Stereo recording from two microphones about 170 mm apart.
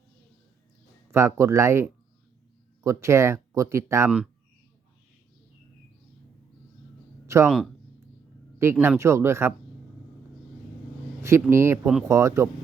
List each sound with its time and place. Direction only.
1.1 s speech: 15° right (ahead or behind)
7.3 s speech: 15° right (ahead or behind)
8.5 s speech: 15° right (ahead or behind)
11.2 s speech: 15° right (ahead or behind)